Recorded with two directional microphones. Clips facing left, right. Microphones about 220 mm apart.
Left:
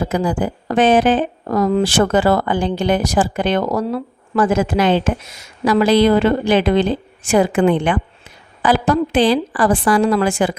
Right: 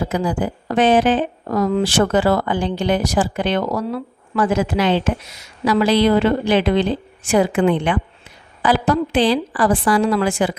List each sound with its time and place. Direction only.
0.1 s speech: 45° left (ahead or behind)